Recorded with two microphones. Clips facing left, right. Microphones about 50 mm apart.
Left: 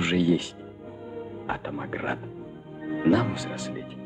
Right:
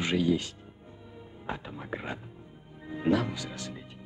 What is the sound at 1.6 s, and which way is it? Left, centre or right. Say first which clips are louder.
Speech: left 7 dB; left.